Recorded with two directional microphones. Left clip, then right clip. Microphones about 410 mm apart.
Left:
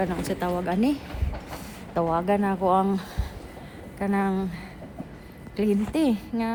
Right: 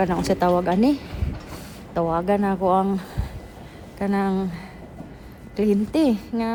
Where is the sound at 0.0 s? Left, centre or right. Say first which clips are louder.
Right 7 dB; centre.